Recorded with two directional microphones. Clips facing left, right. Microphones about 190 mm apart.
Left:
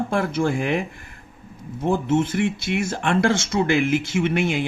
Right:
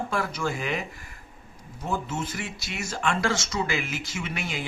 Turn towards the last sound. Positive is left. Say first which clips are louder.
# left 12 dB
turn(degrees=55)  # may be behind; listen again after turning